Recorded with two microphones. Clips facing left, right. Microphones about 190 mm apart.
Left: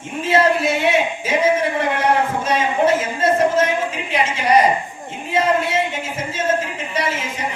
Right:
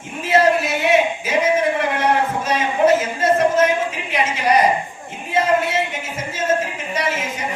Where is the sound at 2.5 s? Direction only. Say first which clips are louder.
Right 2 dB; 30° left (ahead or behind).